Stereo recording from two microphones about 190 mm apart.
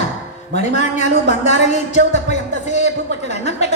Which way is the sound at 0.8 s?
35° left (ahead or behind).